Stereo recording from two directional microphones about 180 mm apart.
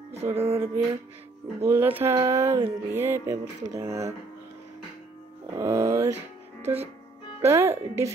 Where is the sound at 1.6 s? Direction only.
15° right (ahead or behind).